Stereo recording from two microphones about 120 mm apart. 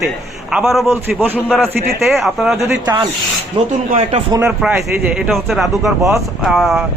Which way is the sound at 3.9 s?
70° right (ahead or behind).